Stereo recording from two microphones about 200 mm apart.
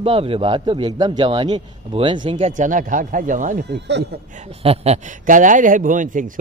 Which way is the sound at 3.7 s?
60° right (ahead or behind).